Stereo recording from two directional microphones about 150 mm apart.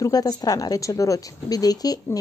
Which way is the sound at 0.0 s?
25° left (ahead or behind).